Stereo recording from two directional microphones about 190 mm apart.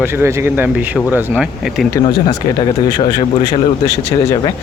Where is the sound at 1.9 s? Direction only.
20° left (ahead or behind).